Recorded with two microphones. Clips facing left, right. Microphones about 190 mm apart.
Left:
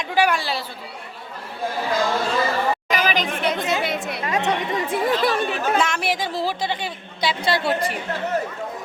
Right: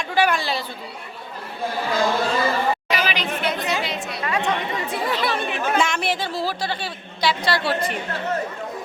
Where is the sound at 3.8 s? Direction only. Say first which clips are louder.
Left 3 dB; 55° left (ahead or behind).